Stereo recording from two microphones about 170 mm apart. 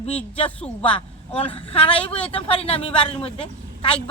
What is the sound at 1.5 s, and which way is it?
Speech, 35° left (ahead or behind).